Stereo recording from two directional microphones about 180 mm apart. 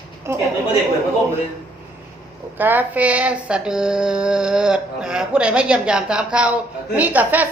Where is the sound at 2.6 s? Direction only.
10° right (ahead or behind).